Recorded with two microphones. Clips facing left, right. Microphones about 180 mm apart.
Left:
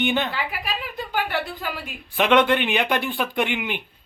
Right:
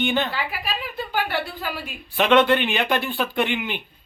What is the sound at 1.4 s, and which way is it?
Speech, 5° right (ahead or behind).